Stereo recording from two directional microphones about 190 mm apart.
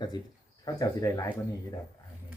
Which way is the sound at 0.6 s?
20° left (ahead or behind).